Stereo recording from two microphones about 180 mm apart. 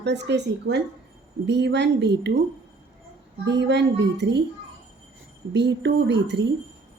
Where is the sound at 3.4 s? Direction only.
75° right (ahead or behind).